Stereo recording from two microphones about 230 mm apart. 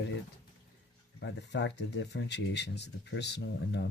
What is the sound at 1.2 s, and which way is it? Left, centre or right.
Speech, left.